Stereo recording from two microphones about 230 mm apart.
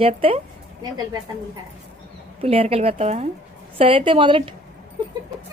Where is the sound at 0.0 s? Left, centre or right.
Right.